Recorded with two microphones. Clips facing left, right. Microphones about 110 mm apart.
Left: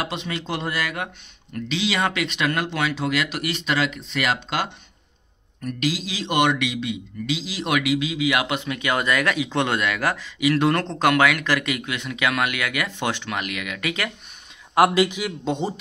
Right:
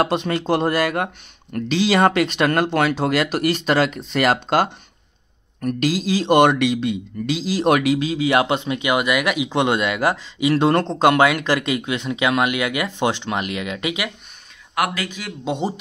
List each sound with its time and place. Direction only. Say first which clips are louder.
0.0 s speech: right 9 dB; 45° right (ahead or behind); by 14.0 s 20° right (ahead or behind)
14.8 s a man's voice: left 6 dB; 25° left (ahead or behind)
15.4 s speech: right 3 dB; 10° right (ahead or behind)